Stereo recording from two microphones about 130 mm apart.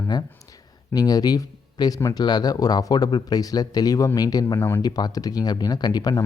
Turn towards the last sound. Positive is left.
turn(degrees=30)  # may be behind; listen again after turning